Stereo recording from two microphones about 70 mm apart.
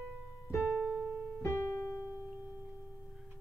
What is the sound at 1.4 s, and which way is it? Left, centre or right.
Piano, left.